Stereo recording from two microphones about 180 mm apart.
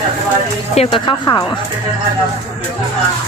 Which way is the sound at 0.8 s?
30° left (ahead or behind).